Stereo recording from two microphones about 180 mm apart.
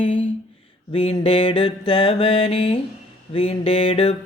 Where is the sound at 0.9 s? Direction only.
30° left (ahead or behind).